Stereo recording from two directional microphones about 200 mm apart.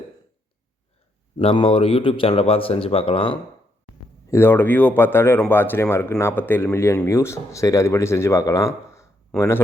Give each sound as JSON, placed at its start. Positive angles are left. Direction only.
{"t": 1.4, "sound": "a man's voice", "side_deg": 30}
{"t": 4.3, "sound": "speech", "side_deg": 10}